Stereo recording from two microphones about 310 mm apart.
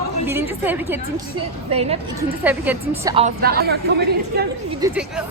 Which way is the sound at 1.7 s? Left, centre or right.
Centre.